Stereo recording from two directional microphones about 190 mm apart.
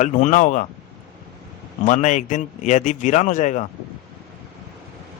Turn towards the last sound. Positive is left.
turn(degrees=40)  # may be behind; listen again after turning